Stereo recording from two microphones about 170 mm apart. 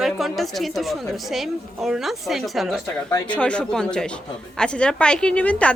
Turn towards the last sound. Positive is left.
turn(degrees=10)  # may be behind; listen again after turning